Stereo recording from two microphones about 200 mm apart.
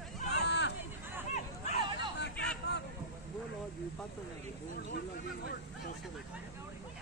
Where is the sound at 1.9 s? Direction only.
60° left (ahead or behind).